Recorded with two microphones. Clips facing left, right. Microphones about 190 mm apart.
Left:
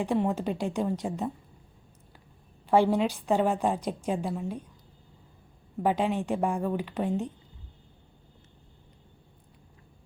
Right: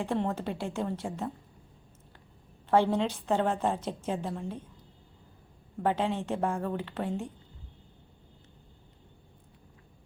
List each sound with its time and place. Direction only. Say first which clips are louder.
0.0 s a woman's voice: left 4 dB; 15° left (ahead or behind)
2.6 s a woman's voice: left 2 dB; 10° left (ahead or behind)
5.8 s a woman's voice: left 2 dB; 15° left (ahead or behind)